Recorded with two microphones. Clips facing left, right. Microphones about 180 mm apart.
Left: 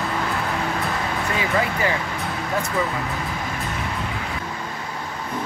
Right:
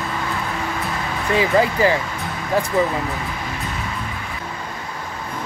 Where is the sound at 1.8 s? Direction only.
30° right (ahead or behind).